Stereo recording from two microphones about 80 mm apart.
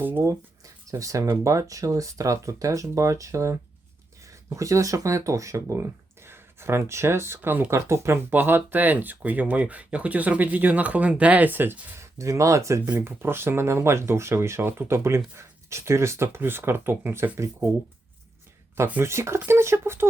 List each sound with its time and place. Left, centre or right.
0.2 s speech: right
7.7 s speech: right
8.3 s speech: right
12.1 s speech: right
19.0 s speech: right